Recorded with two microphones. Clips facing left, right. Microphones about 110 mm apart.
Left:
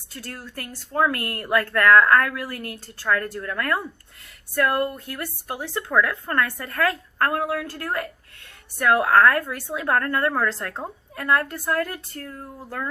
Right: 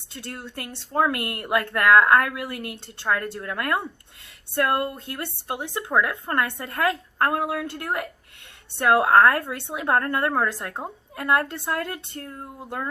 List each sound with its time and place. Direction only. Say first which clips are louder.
0.1 s speech: right 1 dB; 25° right (ahead or behind)